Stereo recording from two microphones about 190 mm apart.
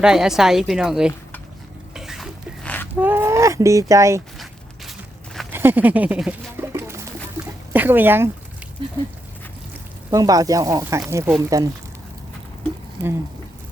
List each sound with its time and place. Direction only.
0.0 s a woman's voice: 5° right (ahead or behind)
1.9 s a sound: centre (ahead or behind)
2.9 s speech: 10° right (ahead or behind)
4.9 s walk: centre (ahead or behind)
5.5 s a sound: 10° right (ahead or behind)
7.7 s speech: 10° right (ahead or behind)
10.1 s speech: 20° right (ahead or behind)